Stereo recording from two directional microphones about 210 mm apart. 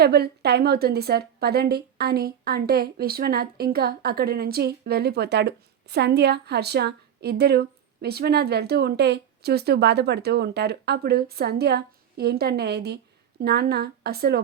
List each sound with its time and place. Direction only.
0.0 s a woman's voice: 50° right (ahead or behind)